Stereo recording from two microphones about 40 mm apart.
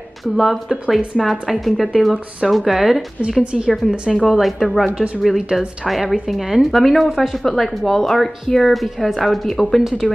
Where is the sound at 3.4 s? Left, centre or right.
Right.